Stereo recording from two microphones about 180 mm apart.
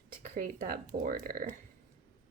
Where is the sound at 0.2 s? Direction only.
45° right (ahead or behind).